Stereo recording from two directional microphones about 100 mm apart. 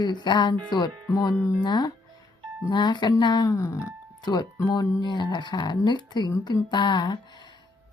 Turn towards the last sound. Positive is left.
turn(degrees=50)  # may be behind; listen again after turning